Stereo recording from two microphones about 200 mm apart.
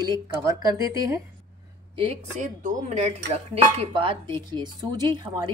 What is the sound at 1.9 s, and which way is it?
A woman's voice, 30° right (ahead or behind).